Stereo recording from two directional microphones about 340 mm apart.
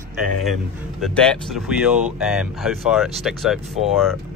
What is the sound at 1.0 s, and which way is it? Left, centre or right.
Speech, centre.